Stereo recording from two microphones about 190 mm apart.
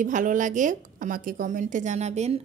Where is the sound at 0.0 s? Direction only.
45° right (ahead or behind).